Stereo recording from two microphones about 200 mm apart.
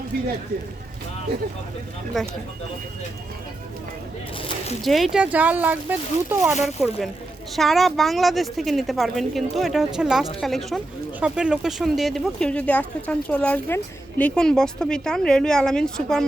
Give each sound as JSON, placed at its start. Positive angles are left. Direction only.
{"t": 2.2, "sound": "speech", "side_deg": 0}
{"t": 4.4, "sound": "speech", "side_deg": 30}
{"t": 4.8, "sound": "speech", "side_deg": 0}
{"t": 6.6, "sound": "speech", "side_deg": 0}